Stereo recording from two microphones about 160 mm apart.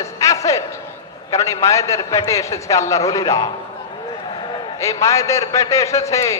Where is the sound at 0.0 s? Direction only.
20° left (ahead or behind).